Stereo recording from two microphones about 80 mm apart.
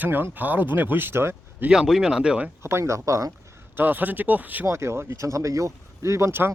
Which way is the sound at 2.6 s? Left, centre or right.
Right.